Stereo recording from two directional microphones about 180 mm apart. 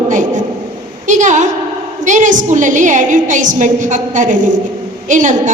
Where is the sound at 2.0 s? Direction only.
45° right (ahead or behind).